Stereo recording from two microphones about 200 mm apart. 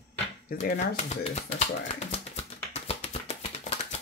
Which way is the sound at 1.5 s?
35° left (ahead or behind).